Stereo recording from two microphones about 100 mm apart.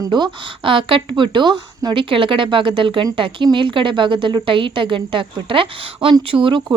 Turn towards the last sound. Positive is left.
turn(degrees=-60)  # may be behind; listen again after turning